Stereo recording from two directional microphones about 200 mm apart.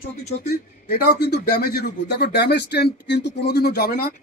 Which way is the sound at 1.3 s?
55° left (ahead or behind).